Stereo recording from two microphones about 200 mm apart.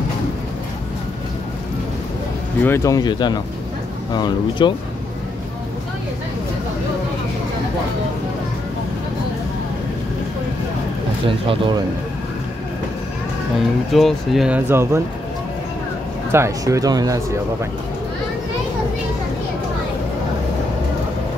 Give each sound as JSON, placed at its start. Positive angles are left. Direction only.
{"t": 2.6, "sound": "speech", "side_deg": 15}
{"t": 11.2, "sound": "speech", "side_deg": -25}
{"t": 13.9, "sound": "speech", "side_deg": 0}
{"t": 16.3, "sound": "speech", "side_deg": -15}